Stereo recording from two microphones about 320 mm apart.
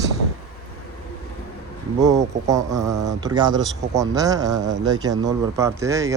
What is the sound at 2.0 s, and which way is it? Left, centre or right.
Speech, centre.